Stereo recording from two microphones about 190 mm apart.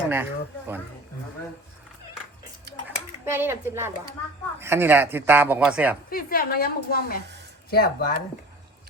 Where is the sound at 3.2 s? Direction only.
10° right (ahead or behind).